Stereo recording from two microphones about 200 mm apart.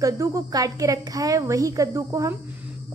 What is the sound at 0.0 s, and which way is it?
A woman's voice, 15° right (ahead or behind).